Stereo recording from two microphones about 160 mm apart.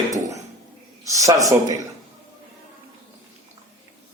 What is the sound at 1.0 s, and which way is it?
Speech, 20° right (ahead or behind).